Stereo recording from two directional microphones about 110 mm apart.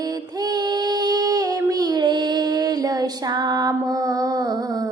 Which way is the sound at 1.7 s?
35° right (ahead or behind).